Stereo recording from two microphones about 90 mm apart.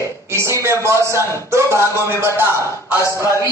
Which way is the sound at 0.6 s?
30° right (ahead or behind).